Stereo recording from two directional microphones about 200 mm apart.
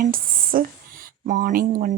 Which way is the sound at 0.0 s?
45° right (ahead or behind).